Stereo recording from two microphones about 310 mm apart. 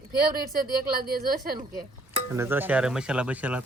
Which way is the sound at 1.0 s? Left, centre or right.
Right.